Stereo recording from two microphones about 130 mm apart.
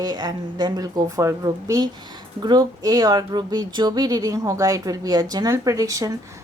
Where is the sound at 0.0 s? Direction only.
30° right (ahead or behind).